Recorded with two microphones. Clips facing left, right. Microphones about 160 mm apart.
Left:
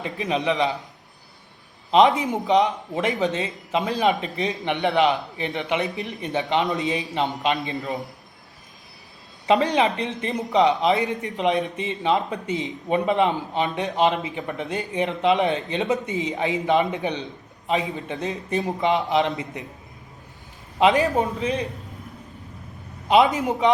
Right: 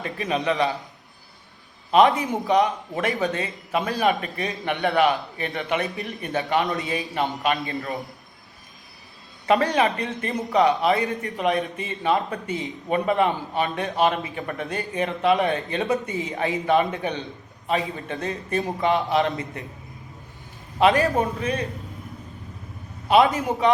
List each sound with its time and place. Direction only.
0.0 s speech: 20° left (ahead or behind)
1.9 s speech: 20° left (ahead or behind)
9.5 s a man's voice: 20° left (ahead or behind)
20.7 s speech: 20° left (ahead or behind)
23.0 s speech: 20° left (ahead or behind)